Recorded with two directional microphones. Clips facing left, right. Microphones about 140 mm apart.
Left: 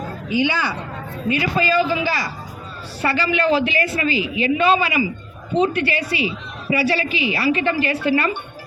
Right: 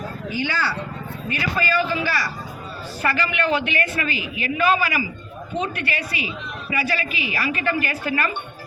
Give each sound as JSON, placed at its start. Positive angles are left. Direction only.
{"t": 0.3, "sound": "a woman's voice", "side_deg": 15}